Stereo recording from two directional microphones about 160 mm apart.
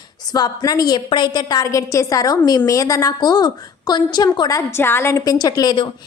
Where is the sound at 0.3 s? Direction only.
25° left (ahead or behind).